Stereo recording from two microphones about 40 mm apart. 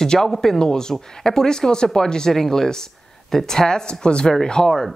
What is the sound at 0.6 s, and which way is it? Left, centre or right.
Speech, centre.